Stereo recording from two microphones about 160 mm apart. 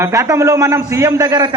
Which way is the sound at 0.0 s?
20° right (ahead or behind).